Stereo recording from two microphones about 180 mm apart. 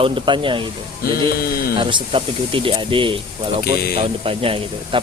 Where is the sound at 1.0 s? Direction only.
55° left (ahead or behind).